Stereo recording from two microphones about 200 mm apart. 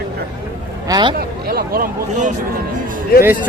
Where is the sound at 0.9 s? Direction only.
25° right (ahead or behind).